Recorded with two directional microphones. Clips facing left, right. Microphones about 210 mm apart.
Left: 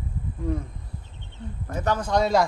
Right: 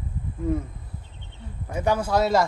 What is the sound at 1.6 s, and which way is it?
Speech, 10° right (ahead or behind).